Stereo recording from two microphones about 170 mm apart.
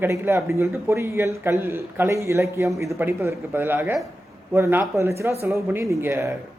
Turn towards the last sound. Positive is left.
turn(degrees=-15)  # may be behind; listen again after turning